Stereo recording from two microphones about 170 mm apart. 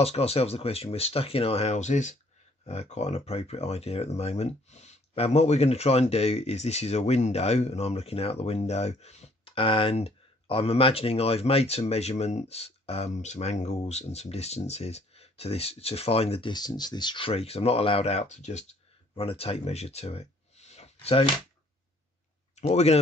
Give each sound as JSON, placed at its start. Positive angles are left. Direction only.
{"t": 0.0, "sound": "speech", "side_deg": 35}
{"t": 22.6, "sound": "speech", "side_deg": 40}